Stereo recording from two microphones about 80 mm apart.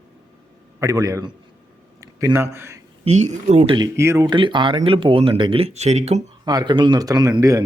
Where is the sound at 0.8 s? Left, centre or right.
Right.